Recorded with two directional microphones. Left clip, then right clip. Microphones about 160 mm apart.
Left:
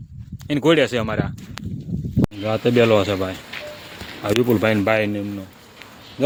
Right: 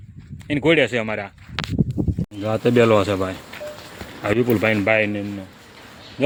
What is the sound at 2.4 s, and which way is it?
Speech, centre (ahead or behind).